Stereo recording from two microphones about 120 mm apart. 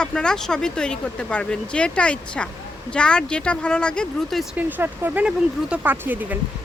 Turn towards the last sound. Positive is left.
turn(degrees=-15)  # may be behind; listen again after turning